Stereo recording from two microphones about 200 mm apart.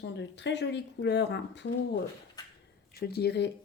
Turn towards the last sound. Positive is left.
turn(degrees=55)  # may be behind; listen again after turning